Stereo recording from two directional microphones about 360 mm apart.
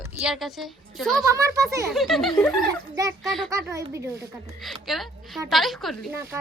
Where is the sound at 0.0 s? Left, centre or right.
Centre.